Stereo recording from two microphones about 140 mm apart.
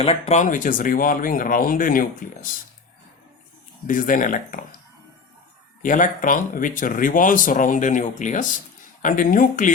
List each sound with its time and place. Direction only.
0.0 s speech: 50° left (ahead or behind); by 2.5 s 85° left
3.8 s speech: 70° left (ahead or behind)
5.8 s speech: 70° left (ahead or behind)